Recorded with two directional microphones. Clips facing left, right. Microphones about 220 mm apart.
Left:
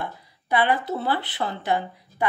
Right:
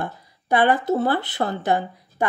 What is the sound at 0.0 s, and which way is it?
Speech, 45° right (ahead or behind).